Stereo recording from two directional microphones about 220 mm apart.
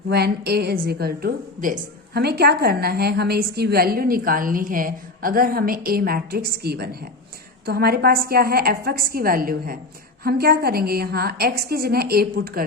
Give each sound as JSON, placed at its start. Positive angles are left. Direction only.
{"t": 0.1, "sound": "a woman's voice", "side_deg": -45}